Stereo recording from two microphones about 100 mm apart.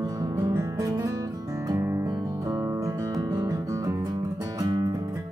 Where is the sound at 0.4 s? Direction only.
35° right (ahead or behind).